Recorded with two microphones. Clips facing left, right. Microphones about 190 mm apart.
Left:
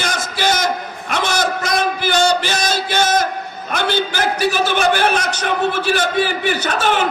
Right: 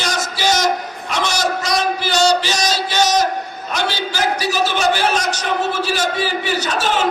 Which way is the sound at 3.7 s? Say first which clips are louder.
Left 3 dB; 55° left (ahead or behind).